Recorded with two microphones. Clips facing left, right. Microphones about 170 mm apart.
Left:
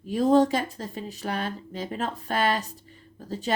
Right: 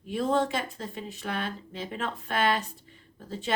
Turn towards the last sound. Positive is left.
turn(degrees=40)  # may be behind; listen again after turning